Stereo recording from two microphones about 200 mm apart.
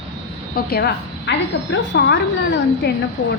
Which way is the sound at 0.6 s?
50° left (ahead or behind).